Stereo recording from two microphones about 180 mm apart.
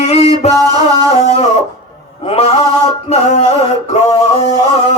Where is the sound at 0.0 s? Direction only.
35° left (ahead or behind).